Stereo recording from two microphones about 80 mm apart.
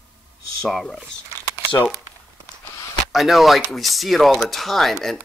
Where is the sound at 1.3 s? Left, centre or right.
Right.